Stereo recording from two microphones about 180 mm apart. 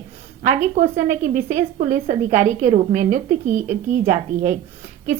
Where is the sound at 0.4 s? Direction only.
40° right (ahead or behind).